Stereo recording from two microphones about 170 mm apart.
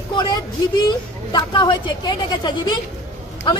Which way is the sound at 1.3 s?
25° left (ahead or behind).